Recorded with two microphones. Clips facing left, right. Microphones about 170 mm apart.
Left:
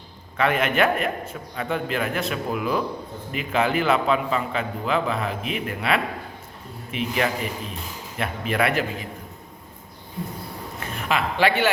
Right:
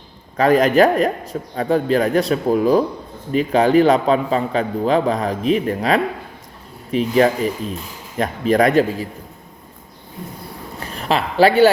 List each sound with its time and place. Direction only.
0.3 s a man's voice: 35° right (ahead or behind)
10.8 s speech: 35° right (ahead or behind)